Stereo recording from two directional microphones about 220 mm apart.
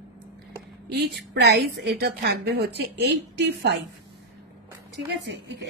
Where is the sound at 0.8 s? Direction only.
45° right (ahead or behind).